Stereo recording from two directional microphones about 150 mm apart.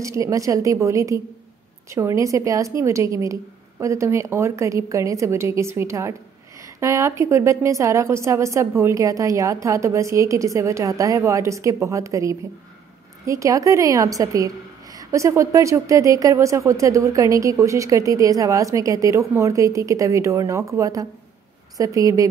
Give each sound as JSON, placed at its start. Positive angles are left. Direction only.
{"t": 0.0, "sound": "speech", "side_deg": -20}